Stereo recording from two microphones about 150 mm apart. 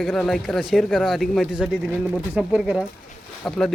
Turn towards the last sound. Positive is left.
turn(degrees=5)  # may be behind; listen again after turning